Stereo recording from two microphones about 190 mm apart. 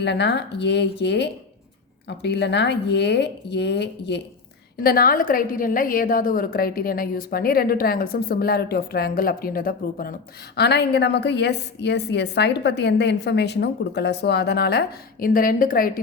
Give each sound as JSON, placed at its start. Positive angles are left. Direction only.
{"t": 0.0, "sound": "speech", "side_deg": 65}
{"t": 4.8, "sound": "a woman's voice", "side_deg": 50}